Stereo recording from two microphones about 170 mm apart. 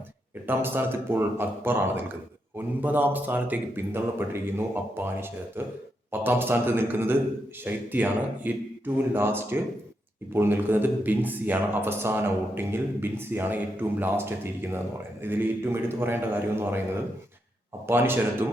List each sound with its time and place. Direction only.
0.4 s speech: 10° right (ahead or behind)
17.8 s speech: 15° right (ahead or behind)